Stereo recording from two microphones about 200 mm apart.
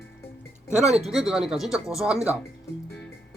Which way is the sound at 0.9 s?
Centre (ahead or behind).